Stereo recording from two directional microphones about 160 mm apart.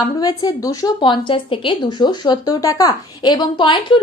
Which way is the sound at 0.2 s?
25° left (ahead or behind).